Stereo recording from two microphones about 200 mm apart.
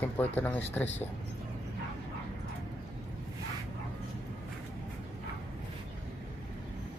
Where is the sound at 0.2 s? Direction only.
10° left (ahead or behind).